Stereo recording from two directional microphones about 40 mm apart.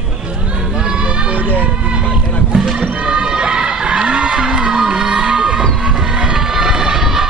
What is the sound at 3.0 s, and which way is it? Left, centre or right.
Music, right.